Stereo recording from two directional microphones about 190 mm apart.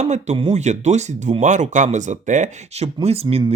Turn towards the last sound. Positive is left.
turn(degrees=-25)  # may be behind; listen again after turning